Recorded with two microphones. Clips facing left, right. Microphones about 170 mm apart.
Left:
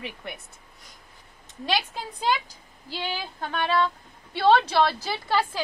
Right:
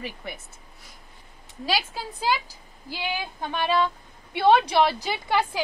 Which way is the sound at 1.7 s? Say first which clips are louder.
Even; 5° right (ahead or behind).